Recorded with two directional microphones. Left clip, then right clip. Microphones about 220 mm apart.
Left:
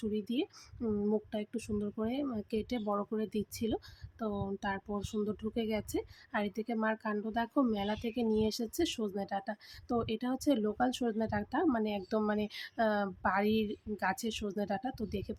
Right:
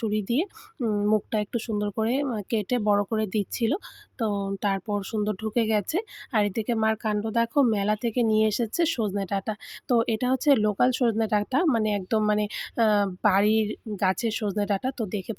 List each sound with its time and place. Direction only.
0.0 s speech: 40° right (ahead or behind)